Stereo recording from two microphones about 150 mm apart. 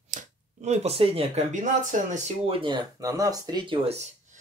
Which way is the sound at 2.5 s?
35° right (ahead or behind).